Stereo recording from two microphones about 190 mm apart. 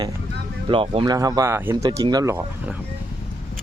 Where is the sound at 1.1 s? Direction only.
20° right (ahead or behind).